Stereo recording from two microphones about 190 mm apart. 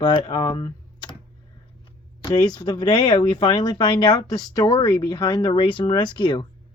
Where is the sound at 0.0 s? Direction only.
25° left (ahead or behind).